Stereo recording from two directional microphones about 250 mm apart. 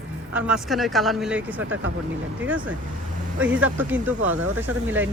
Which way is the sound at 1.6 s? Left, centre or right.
Right.